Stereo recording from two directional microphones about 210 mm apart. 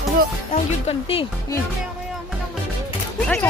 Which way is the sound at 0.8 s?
25° left (ahead or behind).